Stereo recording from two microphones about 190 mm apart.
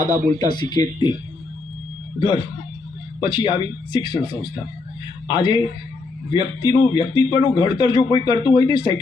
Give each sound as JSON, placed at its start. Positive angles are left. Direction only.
{"t": 0.3, "sound": "a man's voice", "side_deg": 20}
{"t": 2.1, "sound": "a man's voice", "side_deg": 25}